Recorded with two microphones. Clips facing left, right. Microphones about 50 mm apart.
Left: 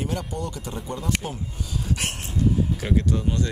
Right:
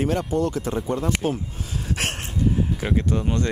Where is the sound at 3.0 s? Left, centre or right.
Right.